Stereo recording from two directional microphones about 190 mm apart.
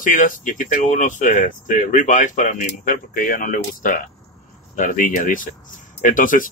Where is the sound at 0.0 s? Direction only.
45° left (ahead or behind).